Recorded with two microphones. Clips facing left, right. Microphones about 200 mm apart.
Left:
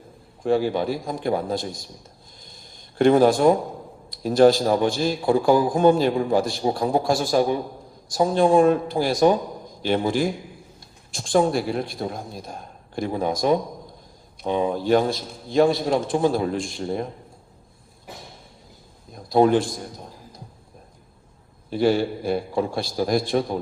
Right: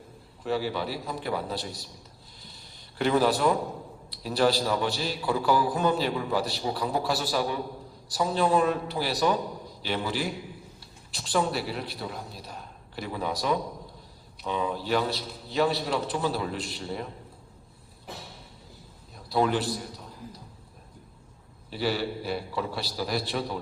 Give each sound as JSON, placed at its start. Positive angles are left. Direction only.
{"t": 0.4, "sound": "a man's voice", "side_deg": 50}
{"t": 3.0, "sound": "a man's voice", "side_deg": 45}
{"t": 14.7, "sound": "a man's voice", "side_deg": 45}
{"t": 19.1, "sound": "a man's voice", "side_deg": 45}
{"t": 21.7, "sound": "a man's voice", "side_deg": 50}